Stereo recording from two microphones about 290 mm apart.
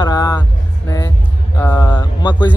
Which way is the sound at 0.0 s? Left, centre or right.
Centre.